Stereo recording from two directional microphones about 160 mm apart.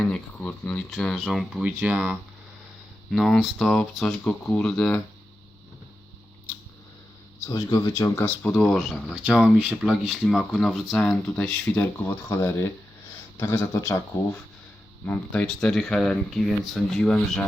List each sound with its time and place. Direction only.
0.0 s speech: 10° left (ahead or behind)
7.4 s speech: 20° left (ahead or behind)
15.0 s speech: 10° left (ahead or behind)